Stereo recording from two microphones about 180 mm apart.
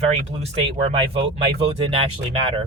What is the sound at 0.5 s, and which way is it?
Speech, 35° right (ahead or behind).